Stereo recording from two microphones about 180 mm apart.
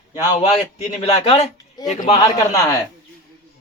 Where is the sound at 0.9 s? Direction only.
35° left (ahead or behind).